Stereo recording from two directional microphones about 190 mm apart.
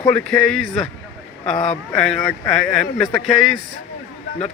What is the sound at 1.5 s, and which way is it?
Speech, 40° left (ahead or behind).